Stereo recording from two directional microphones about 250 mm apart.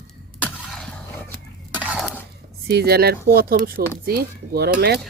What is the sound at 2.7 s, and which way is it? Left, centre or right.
Speech, right.